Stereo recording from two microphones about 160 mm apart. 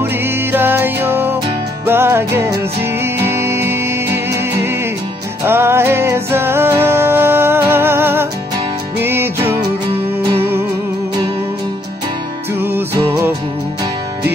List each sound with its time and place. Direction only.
0.0 s music: 15° right (ahead or behind)
12.6 s music: 15° right (ahead or behind)